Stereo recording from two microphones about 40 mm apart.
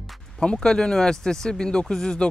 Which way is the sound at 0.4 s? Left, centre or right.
Centre.